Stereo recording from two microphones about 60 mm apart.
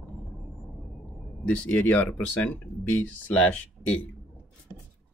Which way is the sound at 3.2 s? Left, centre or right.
Left.